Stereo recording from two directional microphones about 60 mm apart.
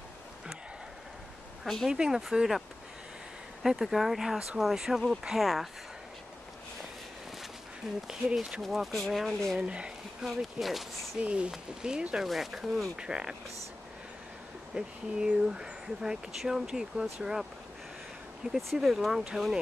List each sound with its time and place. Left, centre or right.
1.6 s speech: centre
1.9 s speech: centre
3.6 s speech: centre
8.1 s speech: centre
9.6 s speech: centre
10.2 s speech: centre
11.1 s speech: centre
12.3 s speech: centre
12.9 s speech: centre
14.8 s speech: centre
18.8 s speech: centre